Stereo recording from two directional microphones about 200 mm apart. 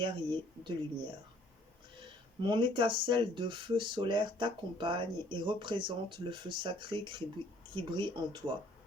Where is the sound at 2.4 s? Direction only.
25° right (ahead or behind).